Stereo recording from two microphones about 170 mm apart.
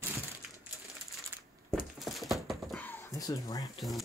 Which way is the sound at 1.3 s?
10° right (ahead or behind).